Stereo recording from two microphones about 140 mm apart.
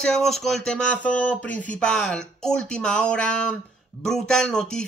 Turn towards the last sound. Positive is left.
turn(degrees=5)  # may be behind; listen again after turning